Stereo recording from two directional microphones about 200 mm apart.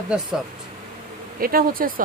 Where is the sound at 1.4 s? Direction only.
45° right (ahead or behind).